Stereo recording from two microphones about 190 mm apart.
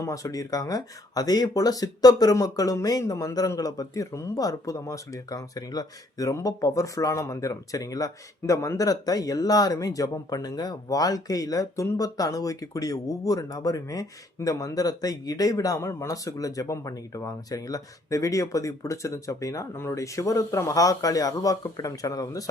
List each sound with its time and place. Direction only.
0.0 s speech: 15° left (ahead or behind)